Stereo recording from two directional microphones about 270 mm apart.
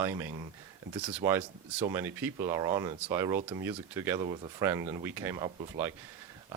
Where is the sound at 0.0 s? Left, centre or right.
Centre.